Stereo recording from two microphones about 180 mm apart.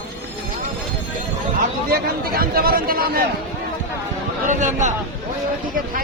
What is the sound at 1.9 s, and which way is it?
A man's voice, 55° right (ahead or behind).